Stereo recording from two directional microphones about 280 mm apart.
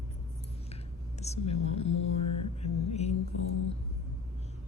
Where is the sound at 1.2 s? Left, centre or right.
Left.